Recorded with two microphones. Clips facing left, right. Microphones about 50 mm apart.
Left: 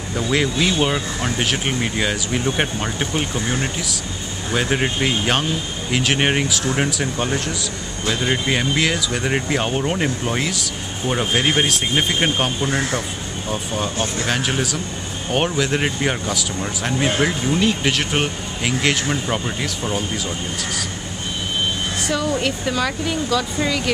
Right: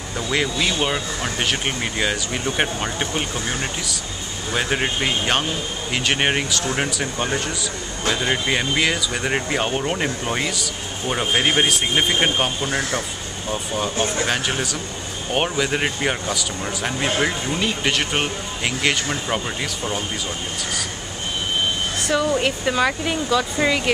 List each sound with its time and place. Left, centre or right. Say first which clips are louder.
0.1 s speech: left 3 dB; centre
13.5 s speech: even; centre
13.9 s speech: right 1 dB; centre
14.2 s speech: left 1 dB; centre
22.1 s speech: right 2 dB; centre